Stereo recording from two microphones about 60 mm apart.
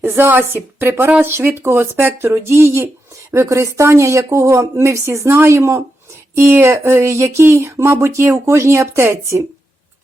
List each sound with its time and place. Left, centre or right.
0.0 s speech: right
3.3 s speech: right